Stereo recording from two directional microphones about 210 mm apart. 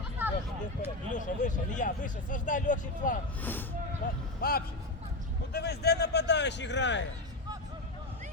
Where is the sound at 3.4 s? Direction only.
10° left (ahead or behind).